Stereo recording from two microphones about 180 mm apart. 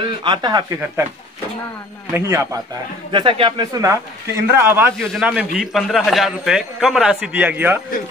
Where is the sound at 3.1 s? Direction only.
30° right (ahead or behind).